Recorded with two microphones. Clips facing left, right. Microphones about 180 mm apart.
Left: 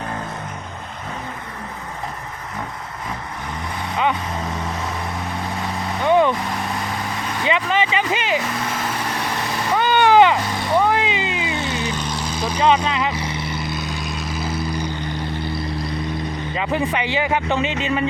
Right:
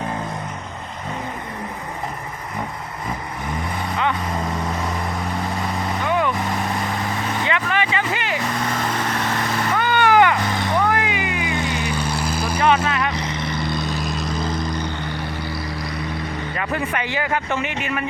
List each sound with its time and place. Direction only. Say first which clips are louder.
6.1 s vehicle: left 6 dB; 25° left (ahead or behind)
7.4 s vehicle: left 4 dB; 20° left (ahead or behind)
9.7 s vehicle: left 3 dB; 20° left (ahead or behind)
10.8 s a sound: left 4 dB; 20° left (ahead or behind)
11.5 s vehicle: right 1 dB; 15° right (ahead or behind)
13.1 s vehicle: right 1 dB; 10° left (ahead or behind)
15.4 s vehicle: left 2 dB; 25° left (ahead or behind)
16.6 s a man's voice: left 3 dB; 20° left (ahead or behind)